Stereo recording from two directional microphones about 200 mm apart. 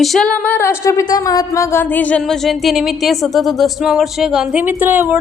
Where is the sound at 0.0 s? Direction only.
Centre (ahead or behind).